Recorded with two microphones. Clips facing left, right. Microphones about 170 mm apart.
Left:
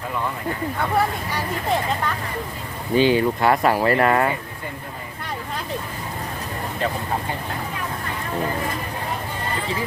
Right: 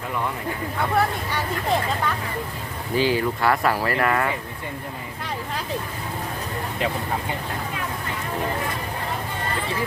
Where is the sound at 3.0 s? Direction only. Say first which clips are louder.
Left 4 dB; 20° left (ahead or behind).